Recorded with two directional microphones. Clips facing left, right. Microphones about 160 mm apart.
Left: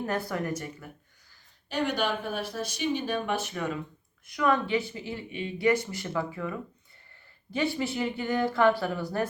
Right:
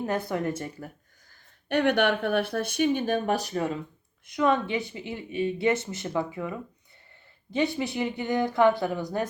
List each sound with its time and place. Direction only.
0.0 s speech: 20° right (ahead or behind)
1.7 s speech: 60° right (ahead or behind); by 9.3 s 20° right (ahead or behind)